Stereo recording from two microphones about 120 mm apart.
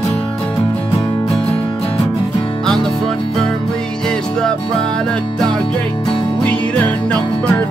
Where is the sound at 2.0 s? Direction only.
30° left (ahead or behind).